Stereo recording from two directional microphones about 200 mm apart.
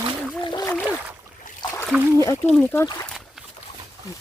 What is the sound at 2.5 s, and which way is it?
Speech, 10° left (ahead or behind).